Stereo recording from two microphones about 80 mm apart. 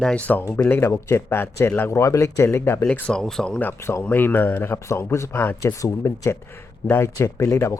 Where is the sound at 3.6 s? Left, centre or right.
Left.